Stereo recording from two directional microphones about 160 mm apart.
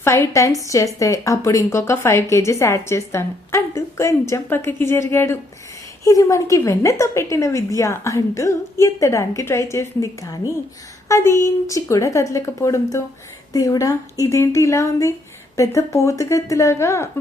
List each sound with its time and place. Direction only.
0.0 s a woman's voice: 15° left (ahead or behind)